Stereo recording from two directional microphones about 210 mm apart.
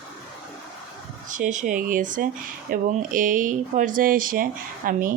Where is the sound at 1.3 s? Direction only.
35° right (ahead or behind).